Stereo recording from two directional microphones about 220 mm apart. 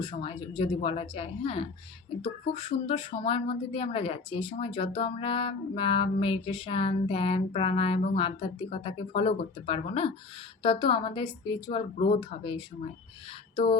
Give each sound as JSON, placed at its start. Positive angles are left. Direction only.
{"t": 0.0, "sound": "speech", "side_deg": 25}